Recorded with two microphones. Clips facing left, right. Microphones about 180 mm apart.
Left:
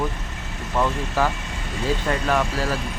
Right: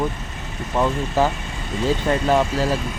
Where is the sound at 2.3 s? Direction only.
25° right (ahead or behind).